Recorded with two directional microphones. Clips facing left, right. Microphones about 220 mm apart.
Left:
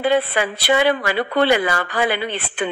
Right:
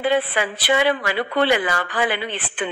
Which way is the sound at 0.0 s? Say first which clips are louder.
Left 2 dB; 40° left (ahead or behind).